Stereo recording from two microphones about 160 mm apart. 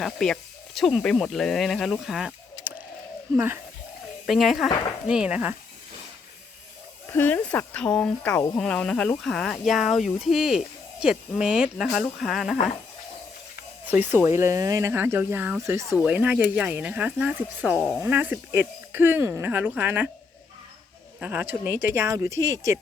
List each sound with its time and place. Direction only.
0.0 s speech: centre (ahead or behind); by 3.6 s 15° right (ahead or behind)
4.3 s speech: centre (ahead or behind)
7.1 s speech: 10° left (ahead or behind)
13.8 s speech: 10° right (ahead or behind)
21.2 s speech: 10° right (ahead or behind)